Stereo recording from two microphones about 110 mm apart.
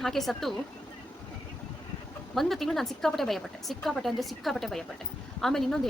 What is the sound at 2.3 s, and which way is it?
Speech, centre (ahead or behind).